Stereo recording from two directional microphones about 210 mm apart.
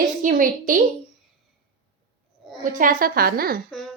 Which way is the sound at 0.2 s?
40° right (ahead or behind).